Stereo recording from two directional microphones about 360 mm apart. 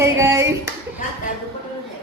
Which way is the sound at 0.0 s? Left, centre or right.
Centre.